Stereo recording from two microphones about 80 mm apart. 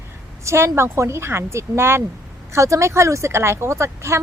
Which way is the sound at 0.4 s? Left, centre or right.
Right.